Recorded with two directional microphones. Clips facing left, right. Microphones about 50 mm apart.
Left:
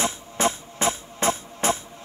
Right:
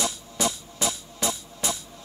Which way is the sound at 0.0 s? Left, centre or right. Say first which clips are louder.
Left 4 dB; left.